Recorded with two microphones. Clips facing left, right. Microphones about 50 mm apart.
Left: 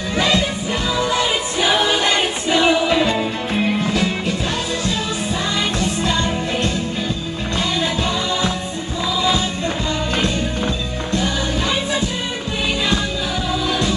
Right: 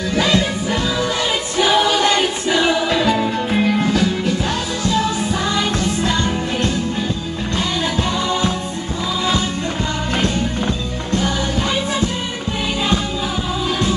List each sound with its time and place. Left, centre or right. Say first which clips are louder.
0.1 s music: right 1 dB; left
1.6 s music: right 3 dB; centre
3.9 s music: right 2 dB; left
5.8 s music: right 1 dB; right